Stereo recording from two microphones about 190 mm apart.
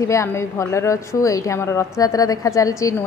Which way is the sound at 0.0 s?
15° left (ahead or behind).